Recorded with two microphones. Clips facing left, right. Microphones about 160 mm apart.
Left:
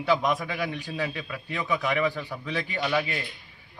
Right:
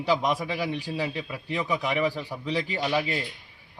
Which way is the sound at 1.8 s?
15° right (ahead or behind).